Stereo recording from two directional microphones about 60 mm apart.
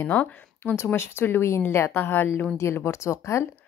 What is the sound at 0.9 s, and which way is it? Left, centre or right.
A woman's voice, left.